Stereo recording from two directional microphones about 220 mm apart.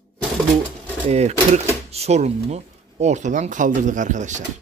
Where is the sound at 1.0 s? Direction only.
30° right (ahead or behind).